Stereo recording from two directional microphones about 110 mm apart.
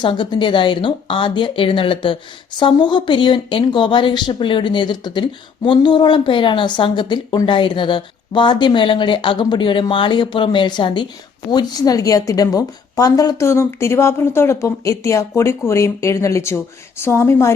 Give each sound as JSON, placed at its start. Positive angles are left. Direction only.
{"t": 0.0, "sound": "a woman's voice", "side_deg": 45}